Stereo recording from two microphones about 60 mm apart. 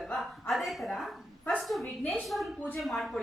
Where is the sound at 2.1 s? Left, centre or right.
Centre.